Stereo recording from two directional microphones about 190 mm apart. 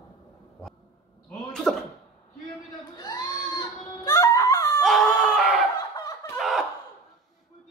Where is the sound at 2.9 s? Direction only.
20° left (ahead or behind).